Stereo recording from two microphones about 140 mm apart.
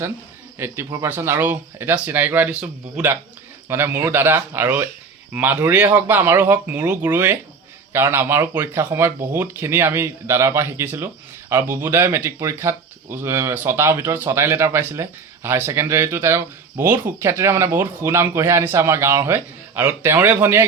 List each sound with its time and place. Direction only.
0.6 s speech: 15° right (ahead or behind)